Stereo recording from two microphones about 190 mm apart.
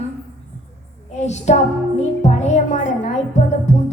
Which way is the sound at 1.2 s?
35° left (ahead or behind).